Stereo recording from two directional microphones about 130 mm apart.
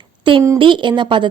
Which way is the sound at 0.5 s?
40° right (ahead or behind).